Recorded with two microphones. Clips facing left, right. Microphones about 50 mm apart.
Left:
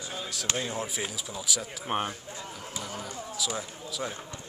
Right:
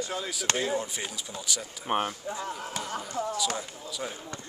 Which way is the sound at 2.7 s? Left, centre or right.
Right.